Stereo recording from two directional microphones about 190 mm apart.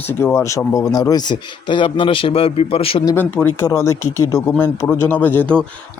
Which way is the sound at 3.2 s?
10° left (ahead or behind).